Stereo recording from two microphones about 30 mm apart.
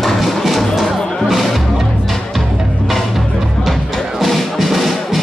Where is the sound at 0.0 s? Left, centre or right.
Centre.